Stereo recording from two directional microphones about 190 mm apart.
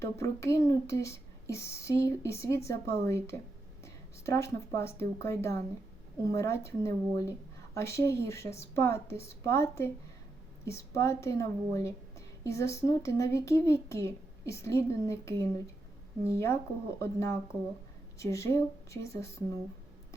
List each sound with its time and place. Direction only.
0.0 s speech: 15° left (ahead or behind)